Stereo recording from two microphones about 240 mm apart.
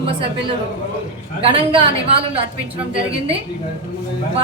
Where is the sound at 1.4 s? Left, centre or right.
Right.